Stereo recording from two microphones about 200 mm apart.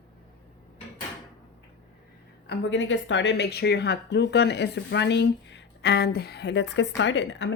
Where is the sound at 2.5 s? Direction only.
65° left (ahead or behind).